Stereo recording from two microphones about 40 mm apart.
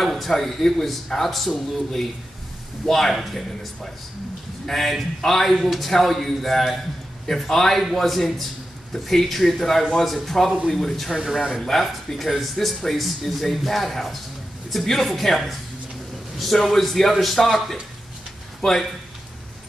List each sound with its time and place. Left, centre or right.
0.0 s speech: centre
2.9 s speech: centre
4.6 s speech: centre
11.1 s speech: centre